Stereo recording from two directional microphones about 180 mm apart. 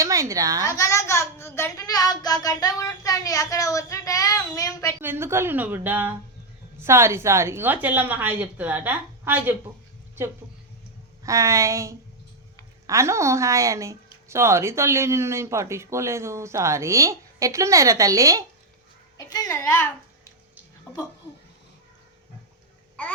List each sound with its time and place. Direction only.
0.0 s a child's voice: 15° right (ahead or behind)
0.7 s a sound: 15° left (ahead or behind)
4.9 s a woman's voice: 15° right (ahead or behind)
11.2 s a woman's voice: 15° right (ahead or behind)
19.1 s a child's voice: 20° left (ahead or behind)
20.9 s a sound: 5° left (ahead or behind)
23.0 s speech: 5° left (ahead or behind)